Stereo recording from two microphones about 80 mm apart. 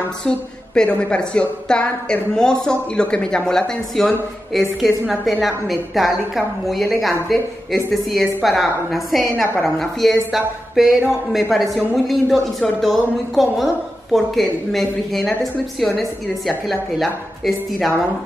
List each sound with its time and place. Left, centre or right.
0.7 s speech: centre